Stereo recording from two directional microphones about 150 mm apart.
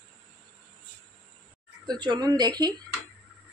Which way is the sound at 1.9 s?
30° right (ahead or behind).